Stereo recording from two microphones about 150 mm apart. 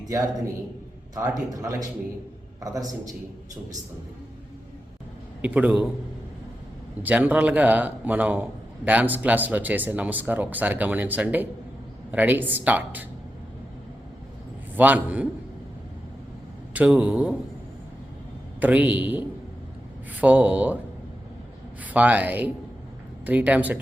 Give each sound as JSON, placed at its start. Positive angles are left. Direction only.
{"t": 0.0, "sound": "a man's voice", "side_deg": -25}
{"t": 5.4, "sound": "a man's voice", "side_deg": -10}
{"t": 7.0, "sound": "a man's voice", "side_deg": -10}
{"t": 14.8, "sound": "a man's voice", "side_deg": -10}
{"t": 16.7, "sound": "a man's voice", "side_deg": -10}
{"t": 18.6, "sound": "a man's voice", "side_deg": -10}
{"t": 21.8, "sound": "a man's voice", "side_deg": -10}